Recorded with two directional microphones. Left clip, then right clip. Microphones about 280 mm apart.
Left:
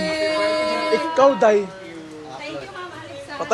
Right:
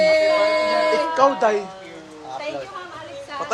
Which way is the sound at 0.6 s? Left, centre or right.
Right.